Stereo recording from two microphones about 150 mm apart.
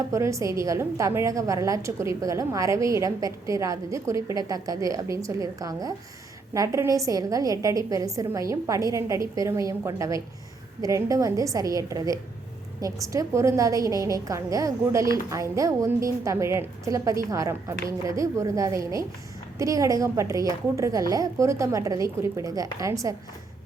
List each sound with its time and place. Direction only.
0.1 s a woman's voice: 20° right (ahead or behind)